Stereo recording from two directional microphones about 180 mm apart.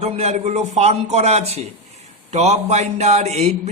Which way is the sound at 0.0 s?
40° right (ahead or behind).